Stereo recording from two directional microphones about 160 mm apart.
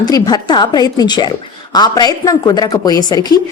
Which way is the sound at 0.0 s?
25° left (ahead or behind).